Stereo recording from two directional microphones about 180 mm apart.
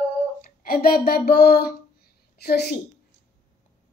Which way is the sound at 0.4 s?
50° left (ahead or behind).